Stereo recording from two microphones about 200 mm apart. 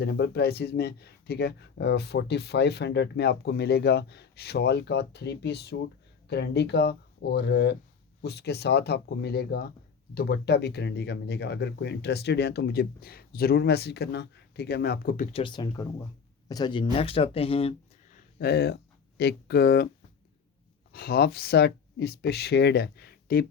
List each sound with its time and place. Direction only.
0.0 s speech: 55° left (ahead or behind); by 17.7 s 30° left (ahead or behind)
18.3 s speech: 55° left (ahead or behind)
20.9 s speech: 50° left (ahead or behind)